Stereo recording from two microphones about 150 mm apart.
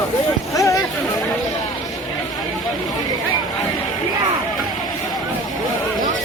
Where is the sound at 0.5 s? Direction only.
20° left (ahead or behind).